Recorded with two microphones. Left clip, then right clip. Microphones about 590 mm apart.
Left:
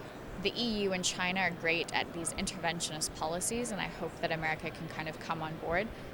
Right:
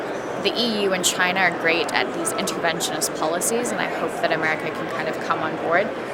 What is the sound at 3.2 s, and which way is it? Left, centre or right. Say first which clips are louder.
Speech: right 12 dB; left.